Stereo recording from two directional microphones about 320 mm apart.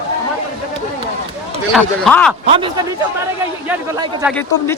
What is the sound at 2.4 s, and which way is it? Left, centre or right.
Speech, centre.